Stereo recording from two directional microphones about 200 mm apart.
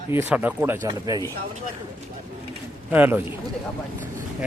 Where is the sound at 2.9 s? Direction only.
10° right (ahead or behind).